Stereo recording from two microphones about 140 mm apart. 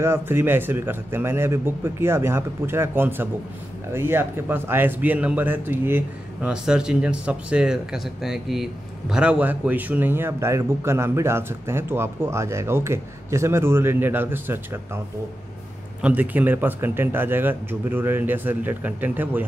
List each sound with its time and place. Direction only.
0.0 s a man's voice: 15° right (ahead or behind)
16.0 s a man's voice: 10° right (ahead or behind)